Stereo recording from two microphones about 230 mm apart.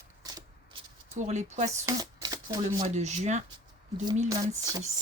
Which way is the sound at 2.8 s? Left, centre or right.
Right.